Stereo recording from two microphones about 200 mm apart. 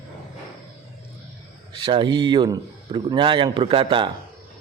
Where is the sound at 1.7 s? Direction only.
25° right (ahead or behind).